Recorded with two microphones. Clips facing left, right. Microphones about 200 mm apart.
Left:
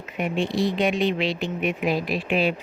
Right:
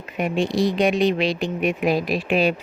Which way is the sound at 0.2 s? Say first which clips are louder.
Right 3 dB; 45° right (ahead or behind).